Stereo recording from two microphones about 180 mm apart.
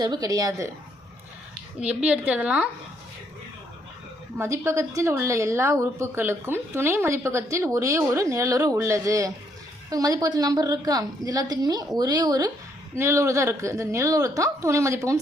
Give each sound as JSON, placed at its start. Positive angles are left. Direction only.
{"t": 0.0, "sound": "a woman's voice", "side_deg": -20}
{"t": 1.8, "sound": "speech", "side_deg": -5}
{"t": 4.4, "sound": "a woman's voice", "side_deg": -15}